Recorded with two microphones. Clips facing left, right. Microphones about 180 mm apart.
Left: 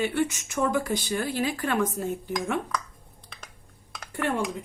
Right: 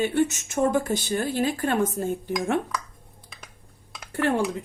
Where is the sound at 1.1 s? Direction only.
45° right (ahead or behind).